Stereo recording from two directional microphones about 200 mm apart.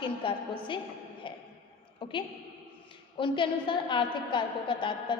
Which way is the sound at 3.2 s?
25° left (ahead or behind).